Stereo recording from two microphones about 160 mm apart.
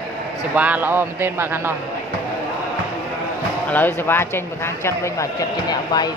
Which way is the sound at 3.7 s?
10° left (ahead or behind).